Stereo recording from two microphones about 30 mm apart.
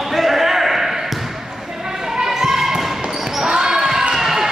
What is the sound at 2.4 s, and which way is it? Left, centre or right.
Bouncing, centre.